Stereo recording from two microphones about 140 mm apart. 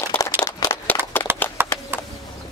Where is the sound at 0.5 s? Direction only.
25° left (ahead or behind).